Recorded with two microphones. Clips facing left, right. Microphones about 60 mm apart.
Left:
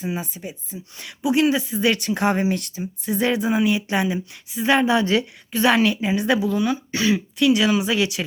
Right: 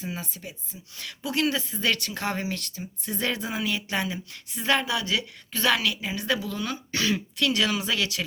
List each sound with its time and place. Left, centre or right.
0.0 s a woman's voice: centre
4.9 s a woman's voice: left
5.5 s a woman's voice: centre